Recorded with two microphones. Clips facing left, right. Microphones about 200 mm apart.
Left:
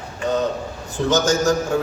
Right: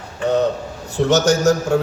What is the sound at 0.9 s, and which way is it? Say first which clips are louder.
Speech: right 3 dB; 70° right (ahead or behind).